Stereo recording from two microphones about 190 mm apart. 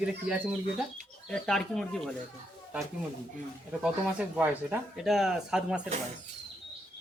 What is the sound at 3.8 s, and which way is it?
Speech, 5° right (ahead or behind).